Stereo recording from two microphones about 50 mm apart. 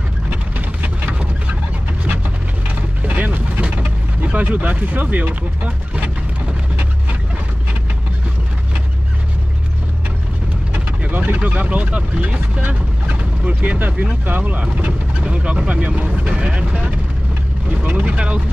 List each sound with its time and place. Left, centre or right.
0.3 s vehicle: right
3.1 s vehicle: right
3.7 s speech: right
10.7 s speech: right